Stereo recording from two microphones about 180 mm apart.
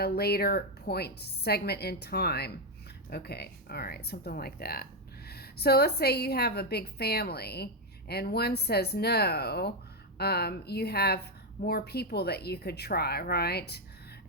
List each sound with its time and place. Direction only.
0.0 s a woman's voice: 60° left (ahead or behind)